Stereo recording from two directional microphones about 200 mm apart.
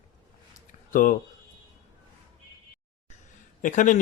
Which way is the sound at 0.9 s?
40° left (ahead or behind).